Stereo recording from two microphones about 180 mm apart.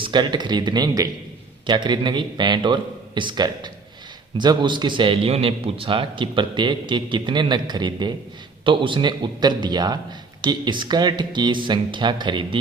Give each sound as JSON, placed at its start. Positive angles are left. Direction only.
{"t": 0.0, "sound": "a man's voice", "side_deg": -25}